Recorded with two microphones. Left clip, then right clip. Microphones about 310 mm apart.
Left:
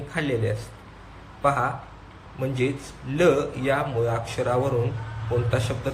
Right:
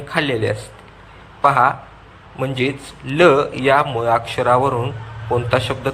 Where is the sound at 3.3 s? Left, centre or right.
Right.